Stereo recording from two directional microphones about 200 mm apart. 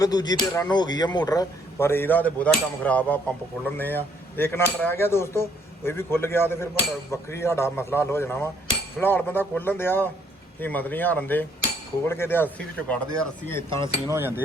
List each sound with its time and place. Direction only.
0.0 s speech: 20° left (ahead or behind)
13.8 s speech: 15° right (ahead or behind)